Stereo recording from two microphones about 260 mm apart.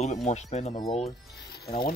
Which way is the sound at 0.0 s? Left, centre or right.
Left.